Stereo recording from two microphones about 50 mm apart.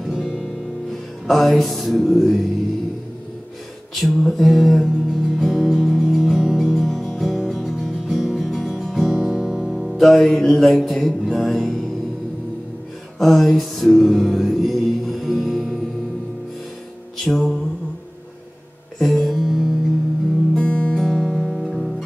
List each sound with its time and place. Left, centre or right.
0.1 s music: centre
1.2 s music: centre
3.9 s music: centre
13.2 s music: centre
17.2 s music: centre
18.9 s music: centre
20.5 s music: centre
21.0 s music: centre